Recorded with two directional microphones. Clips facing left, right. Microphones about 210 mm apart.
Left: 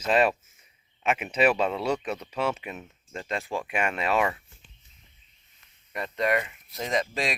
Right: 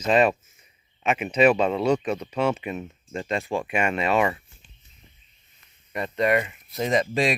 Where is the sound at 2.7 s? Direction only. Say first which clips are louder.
Right 7 dB; 10° right (ahead or behind).